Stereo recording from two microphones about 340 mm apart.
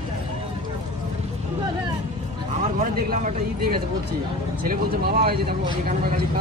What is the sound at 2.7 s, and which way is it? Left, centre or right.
Speech, right.